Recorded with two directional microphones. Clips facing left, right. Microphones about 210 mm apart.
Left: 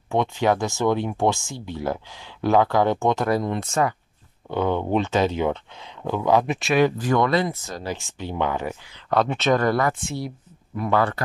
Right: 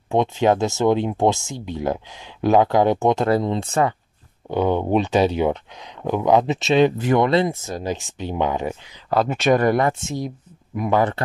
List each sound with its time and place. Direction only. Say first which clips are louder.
0.1 s speech: right 3 dB; 20° right (ahead or behind)
4.5 s speech: right 3 dB; 15° right (ahead or behind)
9.1 s speech: right 2 dB; 5° right (ahead or behind)